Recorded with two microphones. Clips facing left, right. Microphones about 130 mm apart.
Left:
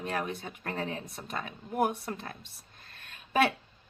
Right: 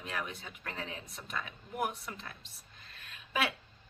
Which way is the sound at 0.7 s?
55° left (ahead or behind).